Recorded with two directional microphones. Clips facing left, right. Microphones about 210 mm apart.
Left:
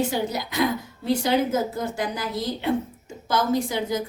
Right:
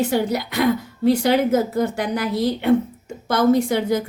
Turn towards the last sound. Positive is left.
turn(degrees=-60)  # may be behind; listen again after turning